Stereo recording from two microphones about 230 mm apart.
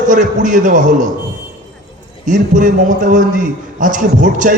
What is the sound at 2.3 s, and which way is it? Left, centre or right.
A man's voice, right.